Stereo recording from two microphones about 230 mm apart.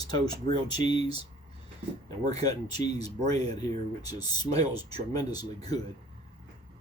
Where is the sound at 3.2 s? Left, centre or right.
Right.